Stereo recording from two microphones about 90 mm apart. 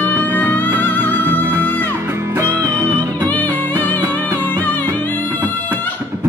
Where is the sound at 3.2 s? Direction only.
20° left (ahead or behind).